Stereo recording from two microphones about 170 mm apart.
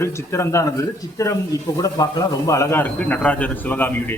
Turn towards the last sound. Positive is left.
turn(degrees=10)  # may be behind; listen again after turning